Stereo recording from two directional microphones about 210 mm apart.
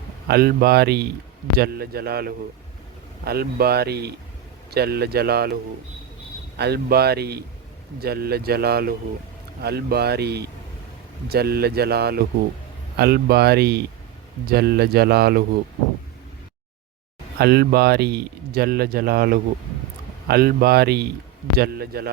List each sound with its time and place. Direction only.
0.3 s speech: 45° right (ahead or behind)
6.6 s speech: 50° right (ahead or behind)
17.3 s speech: 50° right (ahead or behind)